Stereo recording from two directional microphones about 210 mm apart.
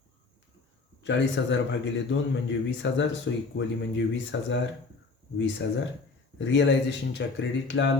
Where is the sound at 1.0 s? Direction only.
60° left (ahead or behind).